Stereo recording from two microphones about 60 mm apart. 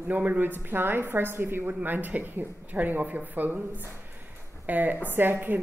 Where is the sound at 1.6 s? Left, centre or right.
Right.